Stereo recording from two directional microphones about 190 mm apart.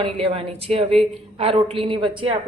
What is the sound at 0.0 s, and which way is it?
A woman's voice, 30° right (ahead or behind).